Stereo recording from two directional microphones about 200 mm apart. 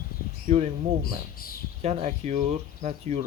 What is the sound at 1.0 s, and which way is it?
Speech, 45° left (ahead or behind).